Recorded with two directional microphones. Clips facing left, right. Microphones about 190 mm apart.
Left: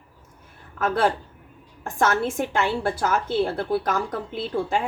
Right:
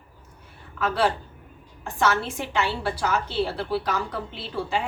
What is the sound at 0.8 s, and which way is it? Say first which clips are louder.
A woman's voice: left 2 dB; 50° left (ahead or behind).